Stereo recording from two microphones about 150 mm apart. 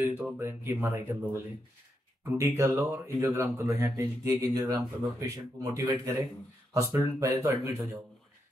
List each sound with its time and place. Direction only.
0.0 s speech: 15° right (ahead or behind)